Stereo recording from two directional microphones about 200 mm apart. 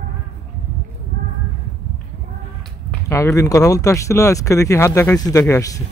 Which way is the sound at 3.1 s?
15° left (ahead or behind).